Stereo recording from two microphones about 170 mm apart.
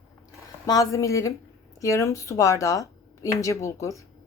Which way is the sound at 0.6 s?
20° left (ahead or behind).